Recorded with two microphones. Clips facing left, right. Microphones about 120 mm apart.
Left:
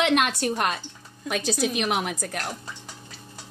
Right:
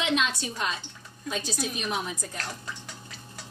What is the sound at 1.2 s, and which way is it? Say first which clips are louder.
A woman's voice: left 6 dB; 80° left.